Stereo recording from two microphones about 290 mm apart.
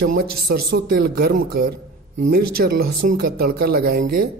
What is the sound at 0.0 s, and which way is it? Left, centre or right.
Speech, right.